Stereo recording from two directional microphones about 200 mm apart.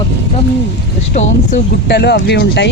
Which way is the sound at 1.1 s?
35° left (ahead or behind).